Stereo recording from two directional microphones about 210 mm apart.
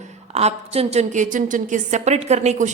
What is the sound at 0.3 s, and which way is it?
A woman's voice, 30° right (ahead or behind).